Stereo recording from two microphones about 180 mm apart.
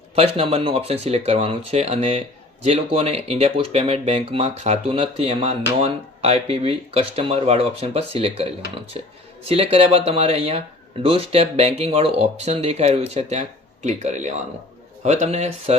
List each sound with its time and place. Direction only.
0.2 s speech: 35° right (ahead or behind)